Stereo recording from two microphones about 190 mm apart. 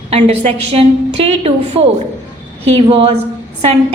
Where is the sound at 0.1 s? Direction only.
35° right (ahead or behind).